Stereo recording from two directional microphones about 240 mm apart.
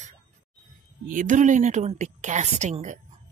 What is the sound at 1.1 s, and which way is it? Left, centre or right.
Speech, right.